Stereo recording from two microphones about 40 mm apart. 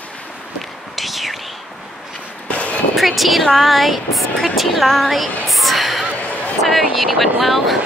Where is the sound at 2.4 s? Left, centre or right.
Left.